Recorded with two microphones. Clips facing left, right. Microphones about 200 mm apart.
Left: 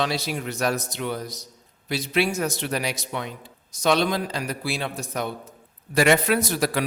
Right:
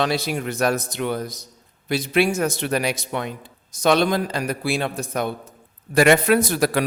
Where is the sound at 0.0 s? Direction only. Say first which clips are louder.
Right 4 dB; 55° right (ahead or behind).